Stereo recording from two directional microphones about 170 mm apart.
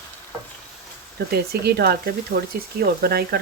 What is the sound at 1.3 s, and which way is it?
Speech, 70° right (ahead or behind).